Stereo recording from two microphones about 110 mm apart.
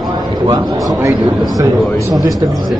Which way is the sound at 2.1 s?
35° right (ahead or behind).